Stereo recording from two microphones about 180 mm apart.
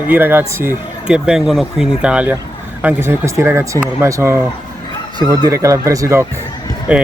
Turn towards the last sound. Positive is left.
turn(degrees=-5)  # may be behind; listen again after turning